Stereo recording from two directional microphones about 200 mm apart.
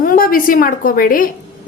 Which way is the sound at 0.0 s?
45° left (ahead or behind).